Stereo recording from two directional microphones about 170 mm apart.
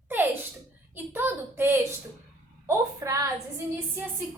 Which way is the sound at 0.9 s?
10° right (ahead or behind).